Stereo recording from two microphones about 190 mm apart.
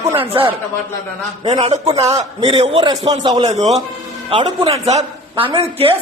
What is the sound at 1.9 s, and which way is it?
A man's voice, 20° right (ahead or behind).